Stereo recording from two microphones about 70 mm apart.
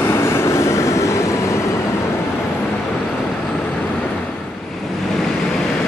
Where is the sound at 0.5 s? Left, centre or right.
Left.